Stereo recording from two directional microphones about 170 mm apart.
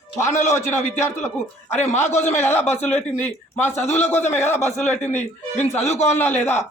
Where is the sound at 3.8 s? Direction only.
40° left (ahead or behind).